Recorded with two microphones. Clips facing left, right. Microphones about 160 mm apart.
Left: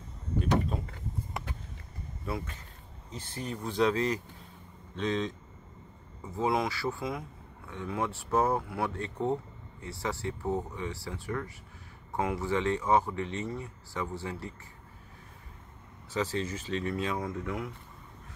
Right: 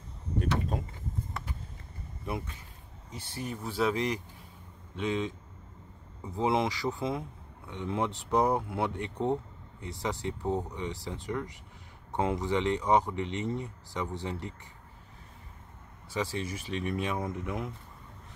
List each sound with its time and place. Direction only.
3.1 s speech: 10° right (ahead or behind)
6.3 s speech: 20° right (ahead or behind)
16.1 s speech: 10° right (ahead or behind)